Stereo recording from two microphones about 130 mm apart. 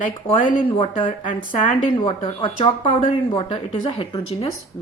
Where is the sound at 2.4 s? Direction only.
40° left (ahead or behind).